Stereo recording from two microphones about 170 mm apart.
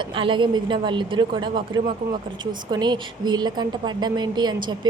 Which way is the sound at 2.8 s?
25° right (ahead or behind).